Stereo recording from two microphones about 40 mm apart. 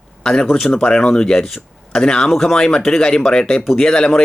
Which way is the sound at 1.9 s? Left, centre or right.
Centre.